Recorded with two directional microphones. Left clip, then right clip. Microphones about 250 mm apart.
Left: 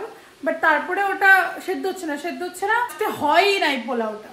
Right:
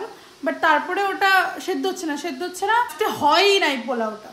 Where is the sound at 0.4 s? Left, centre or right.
Right.